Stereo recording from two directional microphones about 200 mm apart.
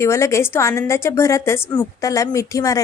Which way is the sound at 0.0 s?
15° left (ahead or behind).